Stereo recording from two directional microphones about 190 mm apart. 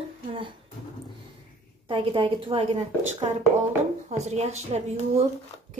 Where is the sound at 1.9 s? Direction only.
25° right (ahead or behind).